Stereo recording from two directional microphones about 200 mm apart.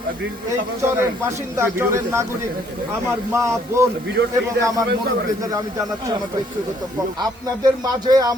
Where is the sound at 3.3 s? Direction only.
15° right (ahead or behind).